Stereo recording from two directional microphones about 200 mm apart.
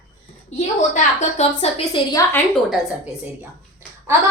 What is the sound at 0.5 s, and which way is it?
A woman's voice, 40° left (ahead or behind).